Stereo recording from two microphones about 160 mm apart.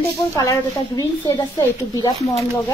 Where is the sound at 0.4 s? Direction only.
20° left (ahead or behind).